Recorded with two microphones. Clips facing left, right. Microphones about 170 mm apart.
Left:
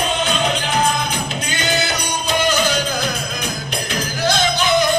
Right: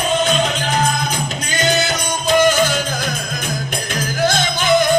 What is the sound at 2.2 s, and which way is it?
Music, 50° right (ahead or behind).